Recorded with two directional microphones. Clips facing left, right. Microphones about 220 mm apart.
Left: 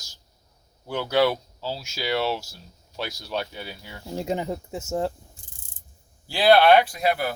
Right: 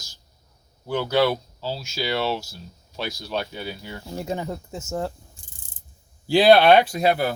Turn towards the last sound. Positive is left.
turn(degrees=-25)  # may be behind; listen again after turning